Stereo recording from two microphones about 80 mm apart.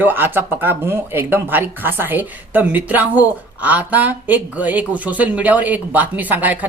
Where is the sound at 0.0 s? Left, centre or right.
Right.